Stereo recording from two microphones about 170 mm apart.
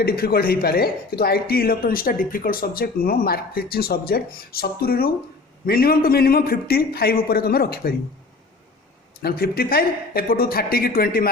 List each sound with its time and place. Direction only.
0.0 s speech: 60° left (ahead or behind)
9.2 s speech: 65° left (ahead or behind)